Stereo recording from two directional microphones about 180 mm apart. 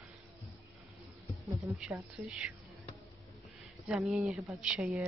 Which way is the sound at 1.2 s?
Centre (ahead or behind).